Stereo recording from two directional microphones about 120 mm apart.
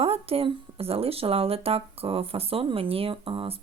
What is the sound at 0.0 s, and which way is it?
Speech, 55° right (ahead or behind).